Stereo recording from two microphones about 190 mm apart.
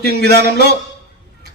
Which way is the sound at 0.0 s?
55° right (ahead or behind).